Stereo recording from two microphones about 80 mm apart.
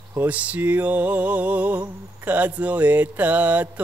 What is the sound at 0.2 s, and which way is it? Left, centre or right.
Mantra, centre.